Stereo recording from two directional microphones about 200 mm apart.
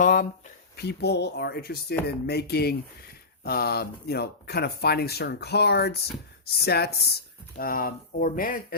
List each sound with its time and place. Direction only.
0.0 s speech: 45° left (ahead or behind)